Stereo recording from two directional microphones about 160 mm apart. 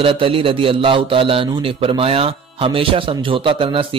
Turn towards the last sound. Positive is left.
turn(degrees=-35)  # may be behind; listen again after turning